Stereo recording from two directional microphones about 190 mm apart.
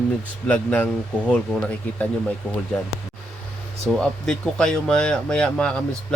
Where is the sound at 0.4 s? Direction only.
10° left (ahead or behind).